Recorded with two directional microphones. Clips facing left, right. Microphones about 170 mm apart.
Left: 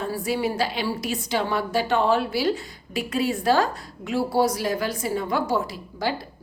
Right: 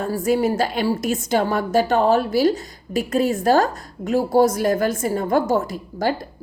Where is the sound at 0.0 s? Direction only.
45° right (ahead or behind).